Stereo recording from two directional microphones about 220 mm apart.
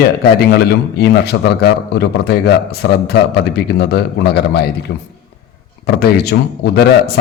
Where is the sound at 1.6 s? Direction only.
50° left (ahead or behind).